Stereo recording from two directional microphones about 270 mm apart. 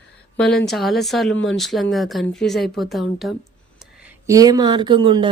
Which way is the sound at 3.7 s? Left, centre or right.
Centre.